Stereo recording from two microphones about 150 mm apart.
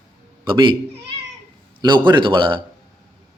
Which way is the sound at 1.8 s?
30° right (ahead or behind).